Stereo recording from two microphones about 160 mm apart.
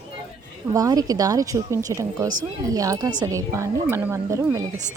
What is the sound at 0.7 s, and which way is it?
A woman's voice, 20° right (ahead or behind).